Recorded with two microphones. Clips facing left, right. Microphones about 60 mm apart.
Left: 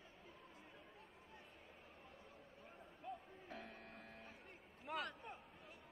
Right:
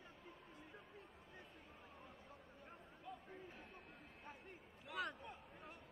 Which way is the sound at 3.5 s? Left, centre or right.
Left.